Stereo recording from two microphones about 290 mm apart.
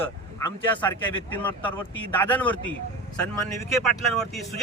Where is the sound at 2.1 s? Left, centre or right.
Centre.